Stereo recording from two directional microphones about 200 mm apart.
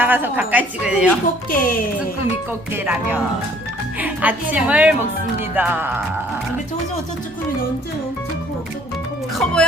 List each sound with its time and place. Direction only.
0.0 s a woman's voice: 10° right (ahead or behind)
1.5 s speech: 45° left (ahead or behind)
2.7 s a woman's voice: 10° right (ahead or behind)
9.4 s speech: 5° left (ahead or behind)